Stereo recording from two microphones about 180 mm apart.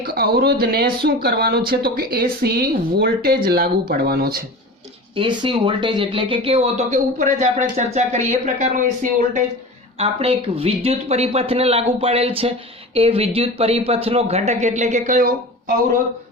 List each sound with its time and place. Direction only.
0.0 s speech: 60° right (ahead or behind)
5.1 s speech: 25° right (ahead or behind); by 9.4 s 45° right (ahead or behind)
10.0 s speech: 35° right (ahead or behind)